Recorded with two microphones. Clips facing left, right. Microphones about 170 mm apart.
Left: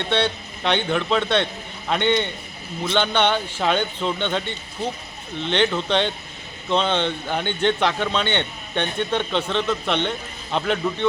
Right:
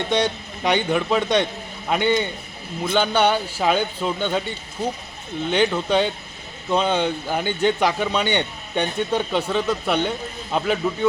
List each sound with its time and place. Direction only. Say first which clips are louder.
0.1 s a man's voice: left 1 dB; 10° right (ahead or behind)